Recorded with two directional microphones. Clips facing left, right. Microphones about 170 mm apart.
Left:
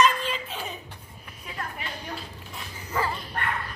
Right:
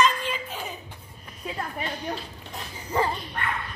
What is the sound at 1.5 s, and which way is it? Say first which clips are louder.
Speech: right 3 dB; 30° right (ahead or behind).